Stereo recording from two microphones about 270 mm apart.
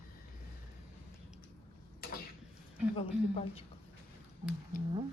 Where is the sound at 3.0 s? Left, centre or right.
Left.